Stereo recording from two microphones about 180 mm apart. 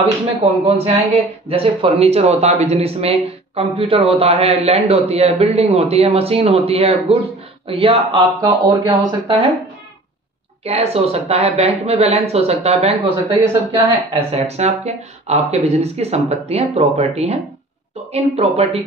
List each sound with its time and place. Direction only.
0.5 s speech: 35° right (ahead or behind)
10.6 s speech: 35° right (ahead or behind)